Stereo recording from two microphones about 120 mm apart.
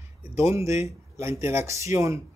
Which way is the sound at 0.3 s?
25° right (ahead or behind).